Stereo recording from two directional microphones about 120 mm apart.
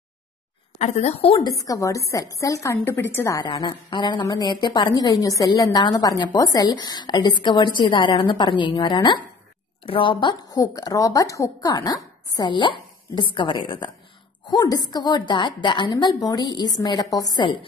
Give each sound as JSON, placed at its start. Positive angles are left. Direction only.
{"t": 0.7, "sound": "a woman's voice", "side_deg": 75}
{"t": 1.4, "sound": "a woman's voice", "side_deg": 30}
{"t": 3.3, "sound": "a woman's voice", "side_deg": 40}